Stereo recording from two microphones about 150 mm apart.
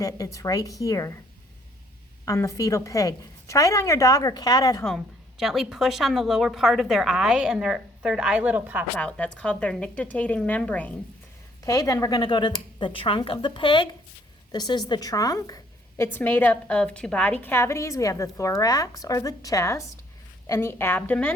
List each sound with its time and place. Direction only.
0.0 s a woman's voice: 20° left (ahead or behind)
2.2 s a woman's voice: 20° left (ahead or behind)
5.4 s a woman's voice: centre (ahead or behind)
9.0 s speech: 10° left (ahead or behind)
11.6 s a woman's voice: 25° left (ahead or behind)